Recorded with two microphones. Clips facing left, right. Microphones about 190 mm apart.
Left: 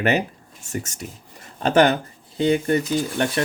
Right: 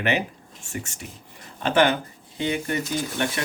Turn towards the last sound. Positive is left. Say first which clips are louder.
# left 4 dB
turn(degrees=40)  # may be behind; listen again after turning